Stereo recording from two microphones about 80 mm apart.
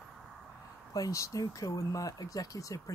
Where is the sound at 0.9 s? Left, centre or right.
Left.